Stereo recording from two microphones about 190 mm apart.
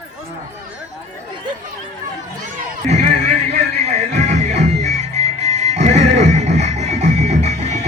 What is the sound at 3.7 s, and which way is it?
Music, 35° right (ahead or behind).